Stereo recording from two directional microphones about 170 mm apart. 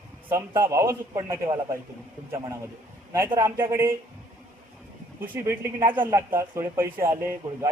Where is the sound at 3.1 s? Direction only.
20° right (ahead or behind).